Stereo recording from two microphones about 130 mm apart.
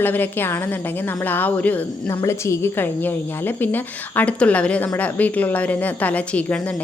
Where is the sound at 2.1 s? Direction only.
25° left (ahead or behind).